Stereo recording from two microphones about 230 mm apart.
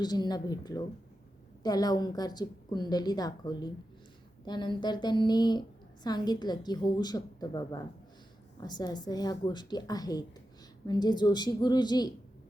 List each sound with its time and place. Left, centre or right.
0.0 s a woman's voice: centre